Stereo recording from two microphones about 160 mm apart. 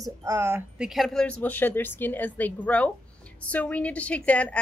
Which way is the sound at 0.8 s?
Centre (ahead or behind).